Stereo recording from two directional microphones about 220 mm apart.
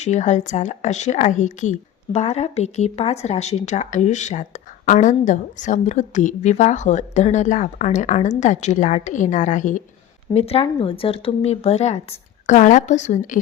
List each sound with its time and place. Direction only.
0.0 s speech: 30° left (ahead or behind)